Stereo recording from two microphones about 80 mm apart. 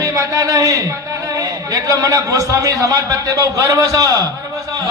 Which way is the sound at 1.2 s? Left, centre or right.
Right.